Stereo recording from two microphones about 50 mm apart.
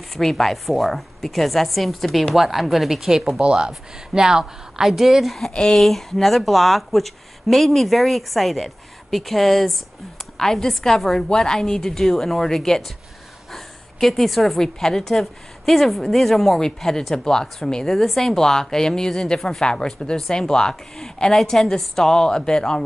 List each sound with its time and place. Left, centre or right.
0.1 s speech: centre
3.3 s a woman's voice: centre
5.5 s a woman's voice: centre
5.8 s a woman's voice: centre